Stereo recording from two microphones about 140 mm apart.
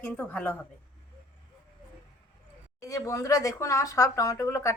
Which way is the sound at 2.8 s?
25° left (ahead or behind).